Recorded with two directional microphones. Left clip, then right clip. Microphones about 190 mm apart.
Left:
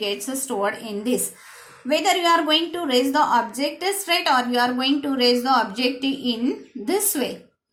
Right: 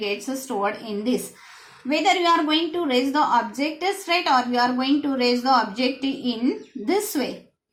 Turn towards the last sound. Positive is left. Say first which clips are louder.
# even
turn(degrees=30)  # may be behind; listen again after turning